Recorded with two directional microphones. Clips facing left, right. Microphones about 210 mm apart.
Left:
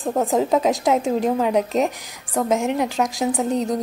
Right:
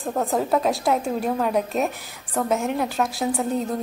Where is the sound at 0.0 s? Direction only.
15° left (ahead or behind).